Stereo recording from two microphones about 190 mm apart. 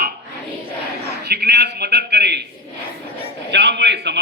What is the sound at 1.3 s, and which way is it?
A man's voice, 60° right (ahead or behind).